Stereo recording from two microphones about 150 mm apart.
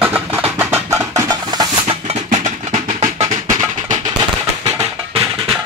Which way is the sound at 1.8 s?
45° right (ahead or behind).